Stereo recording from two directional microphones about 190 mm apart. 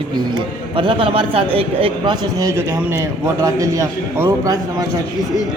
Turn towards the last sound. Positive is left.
turn(degrees=-20)  # may be behind; listen again after turning